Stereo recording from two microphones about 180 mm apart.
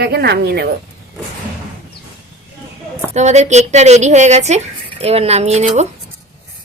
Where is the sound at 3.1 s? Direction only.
40° right (ahead or behind).